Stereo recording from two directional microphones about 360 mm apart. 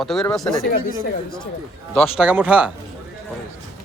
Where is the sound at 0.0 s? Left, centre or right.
Centre.